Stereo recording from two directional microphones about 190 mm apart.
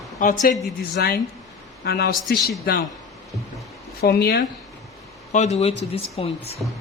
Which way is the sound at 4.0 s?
55° left (ahead or behind).